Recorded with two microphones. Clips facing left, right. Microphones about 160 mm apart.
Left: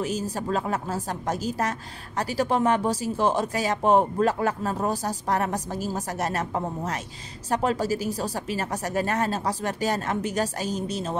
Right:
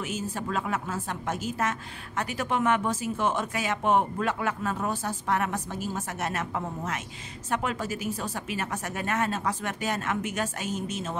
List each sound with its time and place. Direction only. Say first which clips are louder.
0.0 s a woman's voice: left 4 dB; 35° left (ahead or behind)